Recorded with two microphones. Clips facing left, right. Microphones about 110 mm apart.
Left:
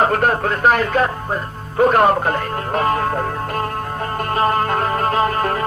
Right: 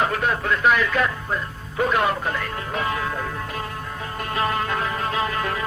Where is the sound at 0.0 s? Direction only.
50° left (ahead or behind).